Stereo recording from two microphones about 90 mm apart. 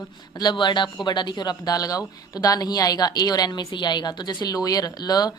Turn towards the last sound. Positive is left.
turn(degrees=45)  # may be behind; listen again after turning